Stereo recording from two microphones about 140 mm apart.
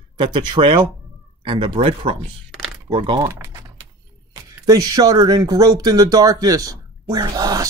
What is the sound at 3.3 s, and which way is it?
Speech, 25° right (ahead or behind).